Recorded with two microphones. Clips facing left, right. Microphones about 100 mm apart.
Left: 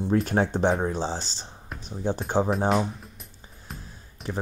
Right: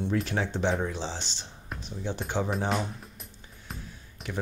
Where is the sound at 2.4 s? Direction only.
Centre (ahead or behind).